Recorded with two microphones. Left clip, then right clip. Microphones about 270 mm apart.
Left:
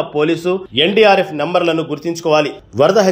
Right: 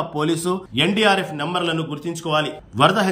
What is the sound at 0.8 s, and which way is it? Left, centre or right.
A man's voice, centre.